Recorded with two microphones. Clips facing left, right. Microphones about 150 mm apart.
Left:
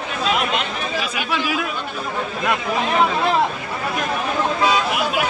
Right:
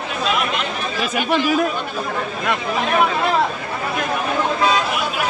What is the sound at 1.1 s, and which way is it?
Speech, 40° right (ahead or behind).